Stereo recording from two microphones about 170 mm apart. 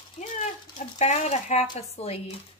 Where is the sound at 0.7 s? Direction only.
40° left (ahead or behind).